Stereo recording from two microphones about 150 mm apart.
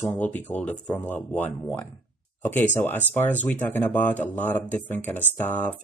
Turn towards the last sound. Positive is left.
turn(degrees=10)  # may be behind; listen again after turning